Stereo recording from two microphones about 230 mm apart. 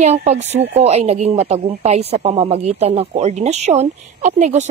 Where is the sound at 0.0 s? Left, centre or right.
Right.